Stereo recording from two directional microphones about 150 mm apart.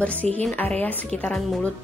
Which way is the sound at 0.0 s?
10° left (ahead or behind).